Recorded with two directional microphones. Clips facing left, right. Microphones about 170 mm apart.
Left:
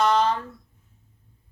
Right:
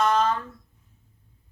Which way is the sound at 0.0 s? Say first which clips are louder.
Left 1 dB; 35° left (ahead or behind).